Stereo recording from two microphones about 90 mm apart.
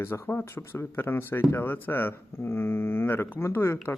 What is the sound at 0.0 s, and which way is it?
Speech, 30° left (ahead or behind).